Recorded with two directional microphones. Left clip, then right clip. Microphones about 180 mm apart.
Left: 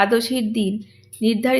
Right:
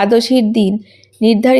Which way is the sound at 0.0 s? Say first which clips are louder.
Right 7 dB; 30° right (ahead or behind).